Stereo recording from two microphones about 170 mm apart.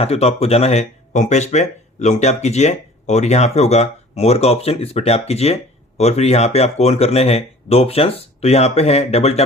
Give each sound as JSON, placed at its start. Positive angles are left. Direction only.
{"t": 0.0, "sound": "speech", "side_deg": 35}